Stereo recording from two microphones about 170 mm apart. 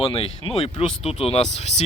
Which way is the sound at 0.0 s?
35° left (ahead or behind).